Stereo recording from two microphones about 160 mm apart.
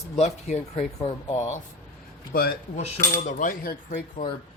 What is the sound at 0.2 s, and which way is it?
Speech, 45° left (ahead or behind).